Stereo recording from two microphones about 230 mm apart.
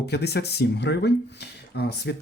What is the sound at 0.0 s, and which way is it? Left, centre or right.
Speech, left.